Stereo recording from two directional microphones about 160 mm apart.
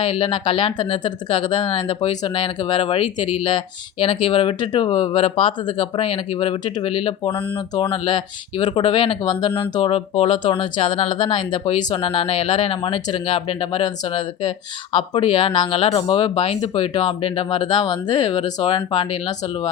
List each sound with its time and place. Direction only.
0.0 s speech: 35° left (ahead or behind)